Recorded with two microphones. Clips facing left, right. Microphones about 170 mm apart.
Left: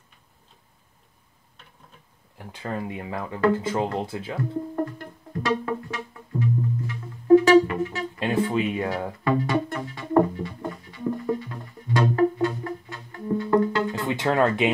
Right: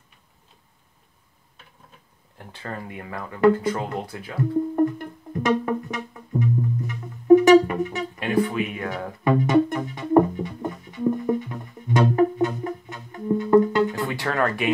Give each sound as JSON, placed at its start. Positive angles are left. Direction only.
{"t": 2.3, "sound": "speech", "side_deg": 15}
{"t": 4.8, "sound": "music", "side_deg": -20}
{"t": 8.2, "sound": "music", "side_deg": 25}
{"t": 9.2, "sound": "music", "side_deg": -20}
{"t": 14.0, "sound": "speech", "side_deg": 20}